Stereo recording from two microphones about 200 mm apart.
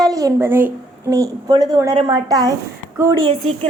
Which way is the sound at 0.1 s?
15° right (ahead or behind).